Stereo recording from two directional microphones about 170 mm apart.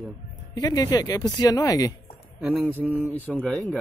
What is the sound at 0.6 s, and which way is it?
Speech, 20° left (ahead or behind).